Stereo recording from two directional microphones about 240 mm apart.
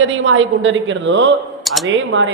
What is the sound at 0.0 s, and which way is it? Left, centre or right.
Speech, right.